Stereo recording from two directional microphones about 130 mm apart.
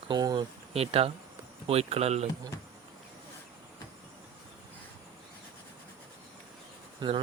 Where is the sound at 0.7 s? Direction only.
50° right (ahead or behind).